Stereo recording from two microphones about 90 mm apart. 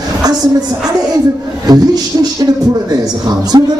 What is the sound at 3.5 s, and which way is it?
Speech, 50° right (ahead or behind).